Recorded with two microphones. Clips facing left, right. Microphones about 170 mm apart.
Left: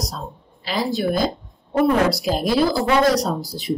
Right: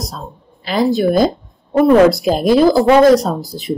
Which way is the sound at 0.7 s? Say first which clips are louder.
Right 7 dB; 50° right (ahead or behind).